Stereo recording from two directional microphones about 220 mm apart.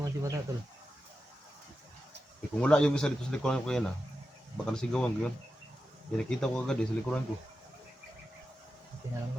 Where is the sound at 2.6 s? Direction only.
5° left (ahead or behind).